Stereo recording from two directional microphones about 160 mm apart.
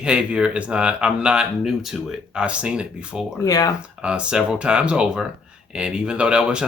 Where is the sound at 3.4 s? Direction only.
20° left (ahead or behind).